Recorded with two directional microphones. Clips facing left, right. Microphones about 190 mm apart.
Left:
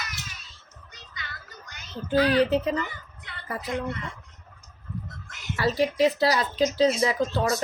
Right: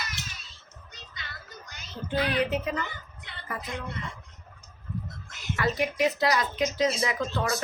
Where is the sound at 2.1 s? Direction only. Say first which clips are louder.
Left 6 dB; 35° left (ahead or behind).